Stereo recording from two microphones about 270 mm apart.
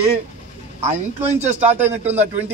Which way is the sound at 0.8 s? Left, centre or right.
Right.